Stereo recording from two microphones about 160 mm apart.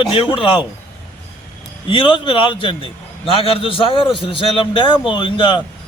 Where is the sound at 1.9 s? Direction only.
30° left (ahead or behind).